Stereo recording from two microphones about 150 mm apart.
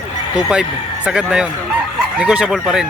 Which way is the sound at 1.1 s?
5° right (ahead or behind).